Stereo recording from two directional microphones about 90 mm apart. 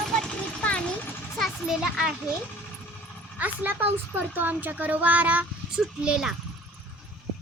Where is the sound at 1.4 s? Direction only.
5° right (ahead or behind).